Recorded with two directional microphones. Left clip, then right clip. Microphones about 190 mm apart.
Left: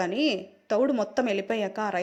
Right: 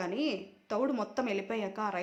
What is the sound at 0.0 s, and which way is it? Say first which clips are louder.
A woman's voice: left 7 dB; 30° left (ahead or behind).